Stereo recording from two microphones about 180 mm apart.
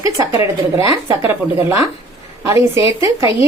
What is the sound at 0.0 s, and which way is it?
A woman's voice, 20° right (ahead or behind).